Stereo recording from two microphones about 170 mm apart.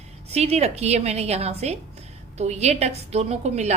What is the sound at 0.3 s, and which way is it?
A woman's voice, 40° right (ahead or behind).